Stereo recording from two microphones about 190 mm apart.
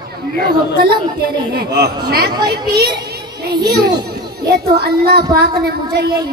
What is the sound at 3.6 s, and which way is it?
A woman's voice, 55° right (ahead or behind).